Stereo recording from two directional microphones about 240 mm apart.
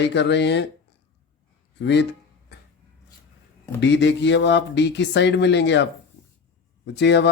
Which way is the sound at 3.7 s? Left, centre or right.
Left.